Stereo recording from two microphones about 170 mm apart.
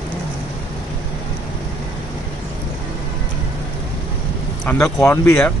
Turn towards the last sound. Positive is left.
turn(degrees=20)  # may be behind; listen again after turning